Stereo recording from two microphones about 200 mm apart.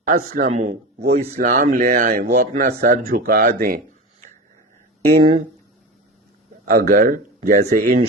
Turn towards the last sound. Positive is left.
turn(degrees=-45)  # may be behind; listen again after turning